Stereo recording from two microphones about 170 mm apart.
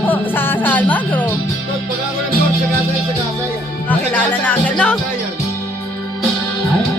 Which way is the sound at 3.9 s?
10° left (ahead or behind).